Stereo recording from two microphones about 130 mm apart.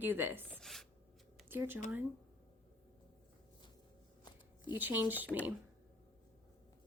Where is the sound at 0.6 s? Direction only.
Centre (ahead or behind).